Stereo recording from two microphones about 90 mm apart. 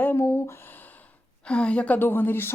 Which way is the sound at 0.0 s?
25° left (ahead or behind).